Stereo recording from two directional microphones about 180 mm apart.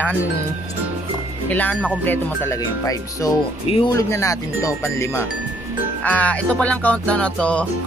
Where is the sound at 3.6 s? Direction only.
30° left (ahead or behind).